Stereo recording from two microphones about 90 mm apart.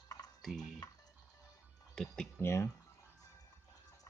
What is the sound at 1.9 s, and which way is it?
Speech, 5° left (ahead or behind).